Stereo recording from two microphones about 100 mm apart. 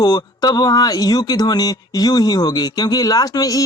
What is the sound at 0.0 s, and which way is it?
Speech, 40° left (ahead or behind).